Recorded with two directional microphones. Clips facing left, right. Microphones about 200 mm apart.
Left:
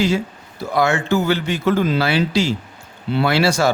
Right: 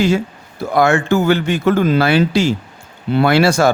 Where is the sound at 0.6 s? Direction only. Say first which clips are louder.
Right 4 dB; 50° right (ahead or behind).